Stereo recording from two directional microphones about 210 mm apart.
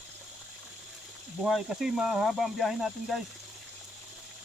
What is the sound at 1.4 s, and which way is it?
Speech, centre (ahead or behind).